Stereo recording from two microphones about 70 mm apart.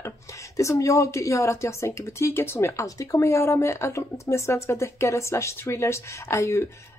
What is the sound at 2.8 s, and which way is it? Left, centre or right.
Speech, left.